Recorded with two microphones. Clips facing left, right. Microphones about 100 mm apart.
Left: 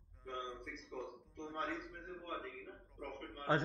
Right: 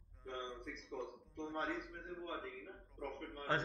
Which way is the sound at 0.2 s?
Centre (ahead or behind).